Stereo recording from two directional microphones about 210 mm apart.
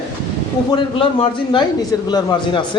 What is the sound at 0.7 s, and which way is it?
Speech, 25° left (ahead or behind).